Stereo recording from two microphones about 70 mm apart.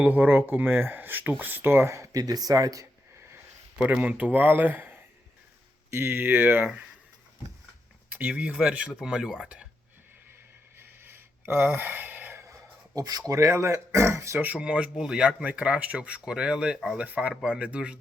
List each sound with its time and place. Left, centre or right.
0.0 s speech: right
2.1 s speech: right
3.8 s speech: centre
8.1 s speech: centre
10.8 s a sound: right
13.0 s speech: right
14.3 s speech: centre
15.4 s speech: centre
17.0 s speech: centre